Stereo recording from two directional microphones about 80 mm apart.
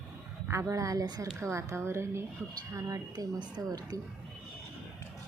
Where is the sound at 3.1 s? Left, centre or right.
Right.